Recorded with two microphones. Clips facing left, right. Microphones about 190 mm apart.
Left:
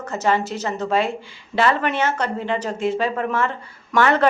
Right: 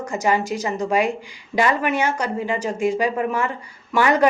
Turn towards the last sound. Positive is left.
turn(degrees=-10)  # may be behind; listen again after turning